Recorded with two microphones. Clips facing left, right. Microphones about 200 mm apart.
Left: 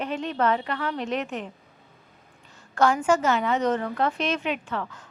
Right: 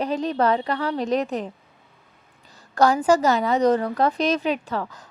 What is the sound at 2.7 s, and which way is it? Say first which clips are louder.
A woman's voice: right 3 dB; 35° right (ahead or behind).